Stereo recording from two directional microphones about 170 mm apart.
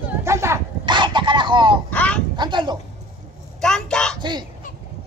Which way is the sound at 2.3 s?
25° right (ahead or behind).